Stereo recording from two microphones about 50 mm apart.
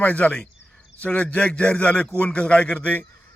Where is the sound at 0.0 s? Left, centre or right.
Left.